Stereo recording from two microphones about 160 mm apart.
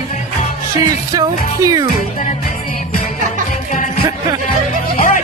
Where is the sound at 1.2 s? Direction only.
20° right (ahead or behind).